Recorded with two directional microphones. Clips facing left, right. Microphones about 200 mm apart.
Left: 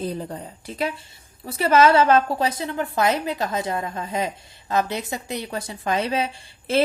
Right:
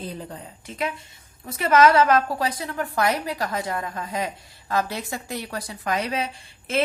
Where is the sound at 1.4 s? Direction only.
30° left (ahead or behind).